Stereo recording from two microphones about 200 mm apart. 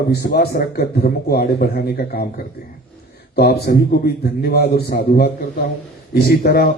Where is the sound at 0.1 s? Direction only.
50° left (ahead or behind).